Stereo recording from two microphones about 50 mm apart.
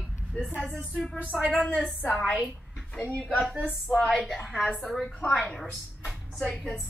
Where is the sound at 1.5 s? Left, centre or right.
Left.